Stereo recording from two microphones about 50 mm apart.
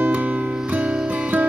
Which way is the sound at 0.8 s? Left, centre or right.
Centre.